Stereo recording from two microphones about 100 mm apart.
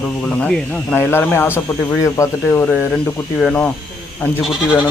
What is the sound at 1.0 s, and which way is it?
Speech, 20° left (ahead or behind).